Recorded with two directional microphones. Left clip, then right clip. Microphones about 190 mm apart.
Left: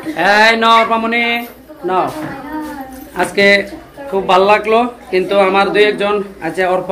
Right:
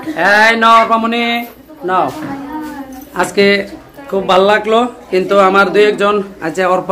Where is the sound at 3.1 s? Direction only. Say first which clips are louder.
Left 1 dB; 30° right (ahead or behind).